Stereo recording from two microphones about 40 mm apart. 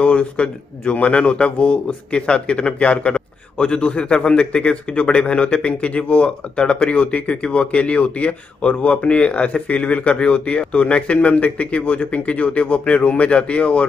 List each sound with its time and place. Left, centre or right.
0.0 s speech: left